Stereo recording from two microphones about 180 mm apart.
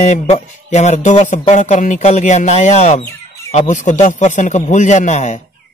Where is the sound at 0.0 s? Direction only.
40° left (ahead or behind).